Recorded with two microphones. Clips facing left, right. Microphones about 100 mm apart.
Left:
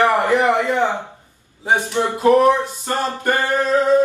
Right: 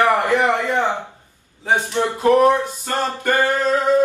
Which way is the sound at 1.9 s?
15° left (ahead or behind).